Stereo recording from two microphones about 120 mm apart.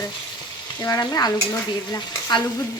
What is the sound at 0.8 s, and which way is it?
Frying, 30° left (ahead or behind).